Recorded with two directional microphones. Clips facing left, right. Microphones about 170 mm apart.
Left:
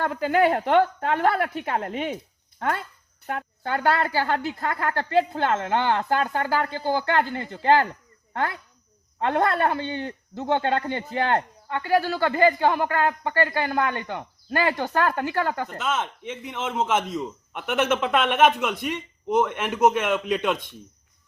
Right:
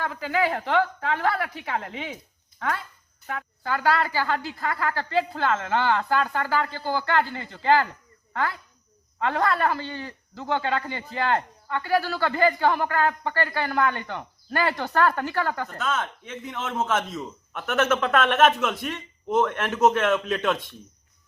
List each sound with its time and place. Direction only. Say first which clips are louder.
0.0 s a woman's voice: left 5 dB; 50° left (ahead or behind)
4.9 s a woman's voice: left 3 dB; 20° left (ahead or behind)
6.5 s a woman's voice: left 1 dB; 45° left (ahead or behind)
6.7 s speech: left 2 dB; 20° left (ahead or behind)
9.4 s a woman's voice: left 1 dB; 25° left (ahead or behind)